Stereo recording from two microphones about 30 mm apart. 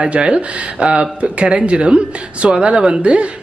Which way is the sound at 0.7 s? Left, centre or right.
Right.